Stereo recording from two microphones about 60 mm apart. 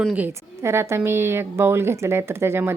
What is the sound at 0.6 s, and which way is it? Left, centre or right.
A woman's voice, right.